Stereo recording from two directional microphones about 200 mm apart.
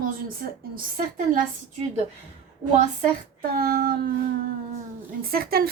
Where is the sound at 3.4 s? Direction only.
45° right (ahead or behind).